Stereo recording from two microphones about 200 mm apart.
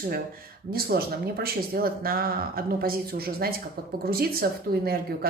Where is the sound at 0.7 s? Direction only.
50° right (ahead or behind).